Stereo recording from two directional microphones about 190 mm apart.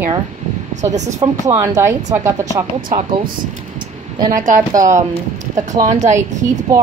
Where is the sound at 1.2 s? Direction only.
20° right (ahead or behind).